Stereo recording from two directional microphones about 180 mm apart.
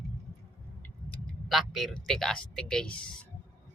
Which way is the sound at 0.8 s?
5° left (ahead or behind).